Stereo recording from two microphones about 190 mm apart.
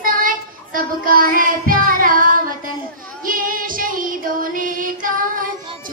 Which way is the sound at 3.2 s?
45° right (ahead or behind).